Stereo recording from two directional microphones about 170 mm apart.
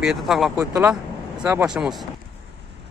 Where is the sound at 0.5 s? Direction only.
15° right (ahead or behind).